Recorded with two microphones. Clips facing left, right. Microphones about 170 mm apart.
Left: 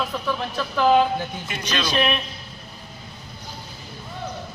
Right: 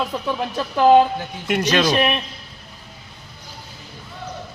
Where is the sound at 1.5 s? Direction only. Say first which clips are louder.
Right 9 dB; 75° right (ahead or behind).